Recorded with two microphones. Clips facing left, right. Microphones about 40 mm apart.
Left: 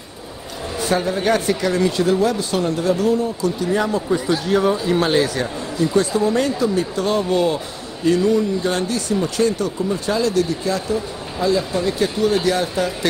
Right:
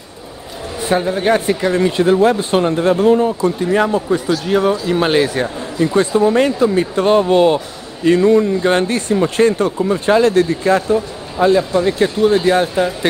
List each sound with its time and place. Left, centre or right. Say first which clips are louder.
0.7 s a man's voice: right 3 dB; right
4.5 s speech: right 3 dB; centre
5.0 s a man's voice: right 3 dB; right